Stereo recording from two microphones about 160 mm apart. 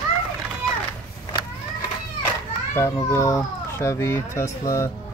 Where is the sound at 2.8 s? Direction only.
15° left (ahead or behind).